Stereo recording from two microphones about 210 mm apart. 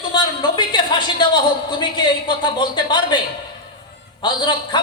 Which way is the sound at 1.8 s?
20° left (ahead or behind).